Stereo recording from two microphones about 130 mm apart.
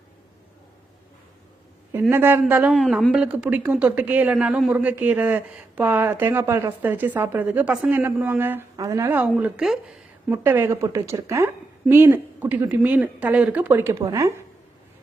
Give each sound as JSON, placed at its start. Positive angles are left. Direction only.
{"t": 1.9, "sound": "a woman's voice", "side_deg": -15}
{"t": 2.7, "sound": "a woman's voice", "side_deg": 5}
{"t": 8.7, "sound": "speech", "side_deg": -25}
{"t": 9.0, "sound": "a woman's voice", "side_deg": -10}